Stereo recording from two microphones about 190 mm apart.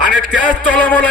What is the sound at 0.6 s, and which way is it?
Speech, 10° left (ahead or behind).